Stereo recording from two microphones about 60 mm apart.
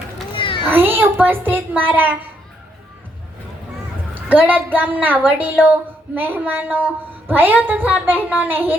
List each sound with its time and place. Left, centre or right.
0.7 s a child's voice: right
4.1 s a woman's voice: right